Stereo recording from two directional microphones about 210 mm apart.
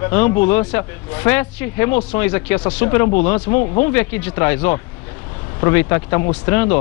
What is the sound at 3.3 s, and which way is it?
Speech, 25° left (ahead or behind).